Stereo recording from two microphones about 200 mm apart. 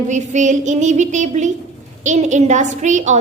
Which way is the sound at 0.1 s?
35° right (ahead or behind).